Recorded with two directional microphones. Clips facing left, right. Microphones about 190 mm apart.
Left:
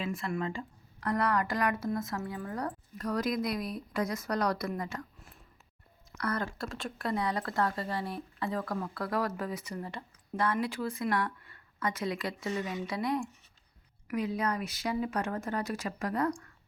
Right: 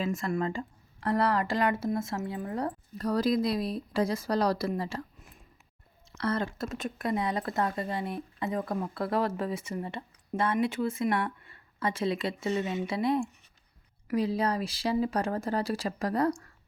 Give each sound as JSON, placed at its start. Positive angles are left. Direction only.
{"t": 0.0, "sound": "speech", "side_deg": -40}
{"t": 0.9, "sound": "speech", "side_deg": -30}
{"t": 6.1, "sound": "speech", "side_deg": -25}